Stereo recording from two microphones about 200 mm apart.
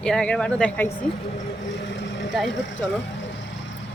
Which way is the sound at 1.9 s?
65° left (ahead or behind).